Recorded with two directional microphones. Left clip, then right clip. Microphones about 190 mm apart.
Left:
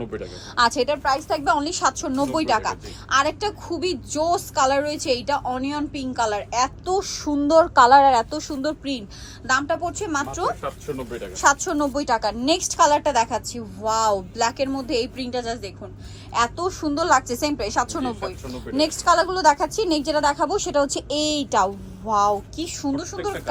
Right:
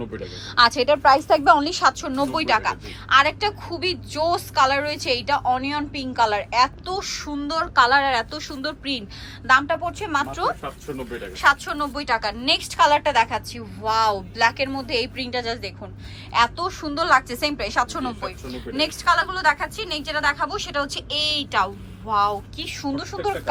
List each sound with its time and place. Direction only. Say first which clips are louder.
0.2 s speech: right 3 dB; 15° left (ahead or behind)
0.9 s a woman's voice: right 6 dB; centre (ahead or behind)
11.3 s a woman's voice: even; 25° left (ahead or behind)